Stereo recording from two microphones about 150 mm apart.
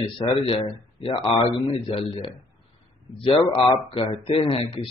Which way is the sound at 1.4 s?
40° left (ahead or behind).